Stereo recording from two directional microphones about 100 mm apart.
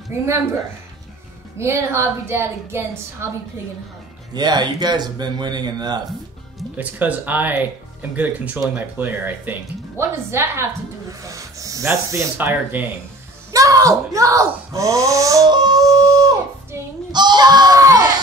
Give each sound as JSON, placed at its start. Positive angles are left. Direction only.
{"t": 0.1, "sound": "a woman's voice", "side_deg": -25}
{"t": 1.6, "sound": "a woman's voice", "side_deg": -25}
{"t": 4.3, "sound": "speech", "side_deg": -45}
{"t": 6.8, "sound": "speech", "side_deg": -15}
{"t": 11.1, "sound": "snort", "side_deg": -35}
{"t": 13.5, "sound": "speech", "side_deg": -35}
{"t": 15.5, "sound": "a sound", "side_deg": -40}
{"t": 17.1, "sound": "speech", "side_deg": -45}